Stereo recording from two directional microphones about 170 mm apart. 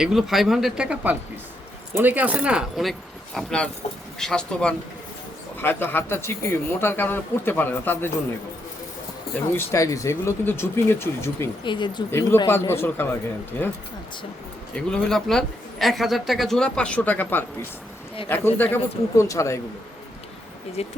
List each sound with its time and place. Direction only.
0.0 s speech: centre (ahead or behind)
9.3 s speech: 15° left (ahead or behind)
11.6 s speech: 25° left (ahead or behind)
12.5 s speech: 15° left (ahead or behind)
14.8 s speech: 5° left (ahead or behind)
20.8 s speech: 35° left (ahead or behind)